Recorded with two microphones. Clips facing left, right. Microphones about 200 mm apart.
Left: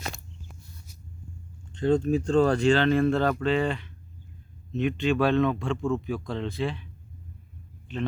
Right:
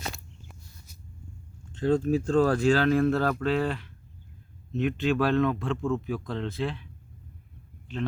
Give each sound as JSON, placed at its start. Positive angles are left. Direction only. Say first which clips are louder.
{"t": 1.7, "sound": "speech", "louder": "left 1 dB", "side_deg": -5}